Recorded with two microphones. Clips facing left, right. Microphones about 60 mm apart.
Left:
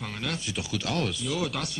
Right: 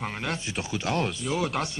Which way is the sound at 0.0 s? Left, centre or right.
Right.